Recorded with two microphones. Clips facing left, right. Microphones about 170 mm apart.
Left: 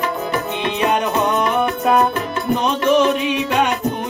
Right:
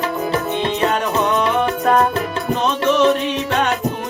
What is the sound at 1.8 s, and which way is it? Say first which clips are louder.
Music: even; 10° left (ahead or behind).